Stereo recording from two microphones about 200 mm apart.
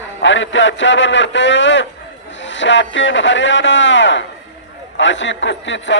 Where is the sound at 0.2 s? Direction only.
70° left (ahead or behind).